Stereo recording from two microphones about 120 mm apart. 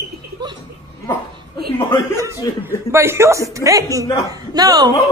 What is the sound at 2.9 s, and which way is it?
A man's voice, 20° right (ahead or behind).